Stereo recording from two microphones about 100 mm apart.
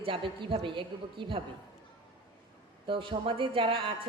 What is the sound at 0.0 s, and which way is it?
A woman's voice, 55° right (ahead or behind).